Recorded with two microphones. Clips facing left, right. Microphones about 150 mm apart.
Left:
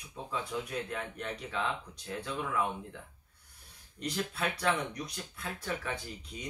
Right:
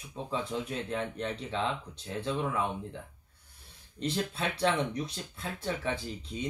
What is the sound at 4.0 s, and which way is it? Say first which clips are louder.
Speech: right 2 dB; 25° right (ahead or behind).